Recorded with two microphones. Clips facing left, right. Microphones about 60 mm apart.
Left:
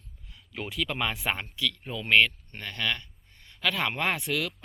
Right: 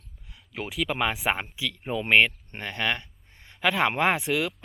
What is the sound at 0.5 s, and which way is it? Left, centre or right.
Speech, centre.